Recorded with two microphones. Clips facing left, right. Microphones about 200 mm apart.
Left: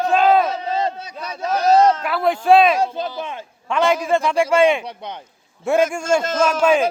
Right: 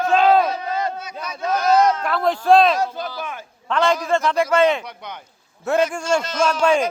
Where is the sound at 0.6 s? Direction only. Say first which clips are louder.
Left 2 dB; 30° left (ahead or behind).